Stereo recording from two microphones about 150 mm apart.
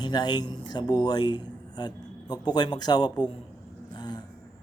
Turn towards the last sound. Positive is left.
turn(degrees=30)  # may be behind; listen again after turning